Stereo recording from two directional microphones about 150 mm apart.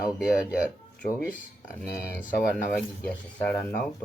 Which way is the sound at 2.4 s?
90° left.